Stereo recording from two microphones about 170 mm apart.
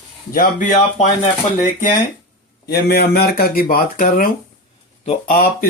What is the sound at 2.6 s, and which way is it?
Speech, 70° left (ahead or behind).